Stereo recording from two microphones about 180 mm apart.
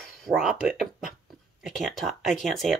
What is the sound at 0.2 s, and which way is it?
Speech, centre (ahead or behind).